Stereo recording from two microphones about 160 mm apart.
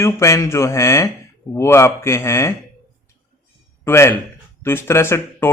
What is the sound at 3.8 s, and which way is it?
Speech, 15° left (ahead or behind).